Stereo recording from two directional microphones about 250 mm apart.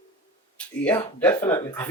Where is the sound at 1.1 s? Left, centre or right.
Centre.